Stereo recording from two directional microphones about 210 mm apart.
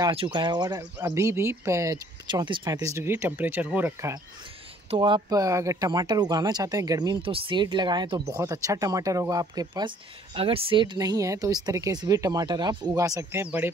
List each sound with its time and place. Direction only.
0.0 s speech: 25° right (ahead or behind)
4.9 s speech: 20° right (ahead or behind)